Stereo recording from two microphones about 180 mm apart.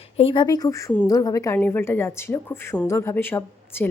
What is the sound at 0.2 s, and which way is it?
Speech, 30° left (ahead or behind).